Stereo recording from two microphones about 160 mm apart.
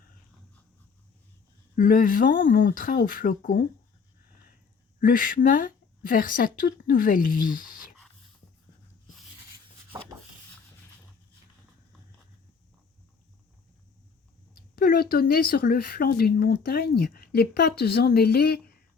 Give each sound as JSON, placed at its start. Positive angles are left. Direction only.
{"t": 1.7, "sound": "speech", "side_deg": 60}
{"t": 4.9, "sound": "speech", "side_deg": 60}
{"t": 9.9, "sound": "a sound", "side_deg": -15}
{"t": 14.8, "sound": "speech", "side_deg": 65}